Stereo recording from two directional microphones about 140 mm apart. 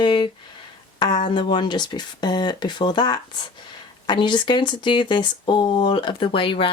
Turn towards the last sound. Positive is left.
turn(degrees=40)  # may be behind; listen again after turning